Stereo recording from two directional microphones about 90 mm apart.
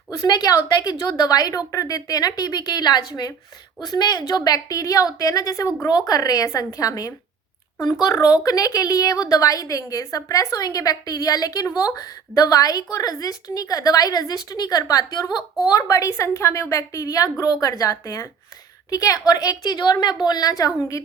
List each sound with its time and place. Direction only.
0.1 s a woman's voice: 45° left (ahead or behind)